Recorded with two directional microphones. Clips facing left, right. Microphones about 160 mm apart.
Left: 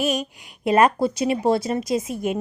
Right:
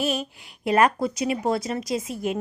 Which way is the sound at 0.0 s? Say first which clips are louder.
Left 3 dB; 15° left (ahead or behind).